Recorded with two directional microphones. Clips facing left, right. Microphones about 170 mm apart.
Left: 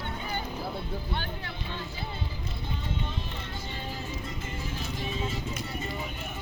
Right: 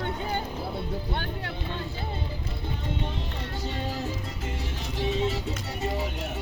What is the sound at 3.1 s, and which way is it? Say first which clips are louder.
Music: right 3 dB; 70° right (ahead or behind).